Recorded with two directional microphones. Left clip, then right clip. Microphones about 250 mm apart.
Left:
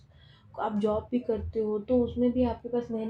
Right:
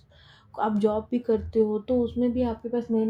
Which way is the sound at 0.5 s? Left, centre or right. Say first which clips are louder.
Right 4 dB; right.